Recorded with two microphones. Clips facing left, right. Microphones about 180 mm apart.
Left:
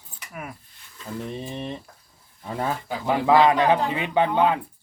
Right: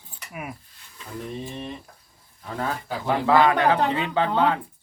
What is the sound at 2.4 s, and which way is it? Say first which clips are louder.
A man's voice: left 1 dB; 20° left (ahead or behind).